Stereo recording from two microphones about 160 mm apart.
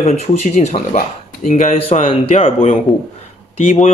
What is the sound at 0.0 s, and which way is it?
Speech, 40° left (ahead or behind).